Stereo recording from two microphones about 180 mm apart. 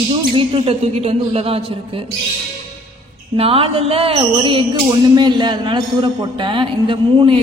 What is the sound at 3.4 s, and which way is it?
Speech, 30° right (ahead or behind).